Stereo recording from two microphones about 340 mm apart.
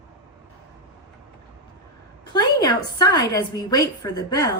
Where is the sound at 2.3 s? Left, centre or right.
Centre.